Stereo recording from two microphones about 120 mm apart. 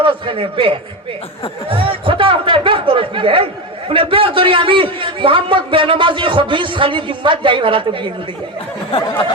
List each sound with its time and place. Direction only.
0.0 s speech: 45° right (ahead or behind)